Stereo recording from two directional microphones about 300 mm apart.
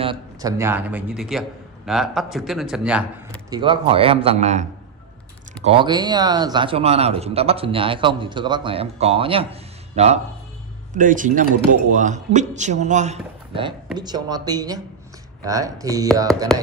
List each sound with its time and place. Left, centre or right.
0.0 s a man's voice: centre